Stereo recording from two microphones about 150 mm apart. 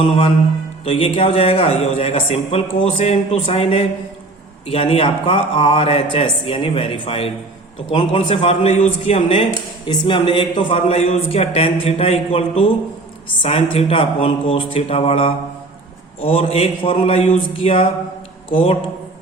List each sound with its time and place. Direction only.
0.9 s a man's voice: 40° left (ahead or behind)